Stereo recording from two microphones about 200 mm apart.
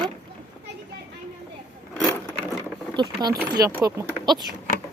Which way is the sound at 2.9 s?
20° right (ahead or behind).